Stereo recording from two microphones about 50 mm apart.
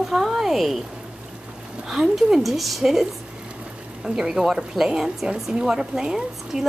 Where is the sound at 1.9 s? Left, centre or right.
Centre.